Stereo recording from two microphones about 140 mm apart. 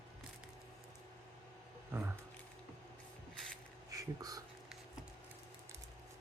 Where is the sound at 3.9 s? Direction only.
25° right (ahead or behind).